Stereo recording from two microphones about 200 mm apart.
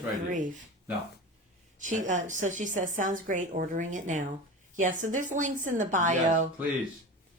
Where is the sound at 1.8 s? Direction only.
40° right (ahead or behind).